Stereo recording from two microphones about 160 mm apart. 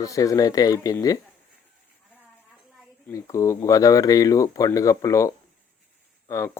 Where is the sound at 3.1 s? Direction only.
20° left (ahead or behind).